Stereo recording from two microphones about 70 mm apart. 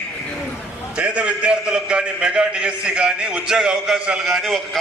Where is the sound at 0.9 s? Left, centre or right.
Centre.